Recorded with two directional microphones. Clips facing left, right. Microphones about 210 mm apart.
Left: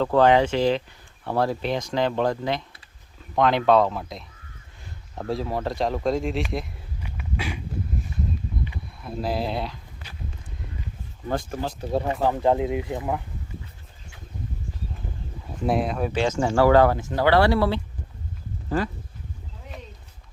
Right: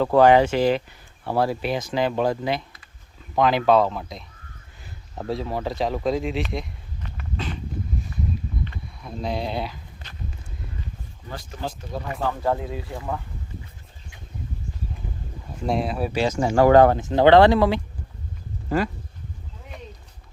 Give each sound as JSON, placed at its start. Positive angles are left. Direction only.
{"t": 0.0, "sound": "speech", "side_deg": -10}
{"t": 8.6, "sound": "walk", "side_deg": 5}
{"t": 11.8, "sound": "speech", "side_deg": 30}
{"t": 15.6, "sound": "speech", "side_deg": 0}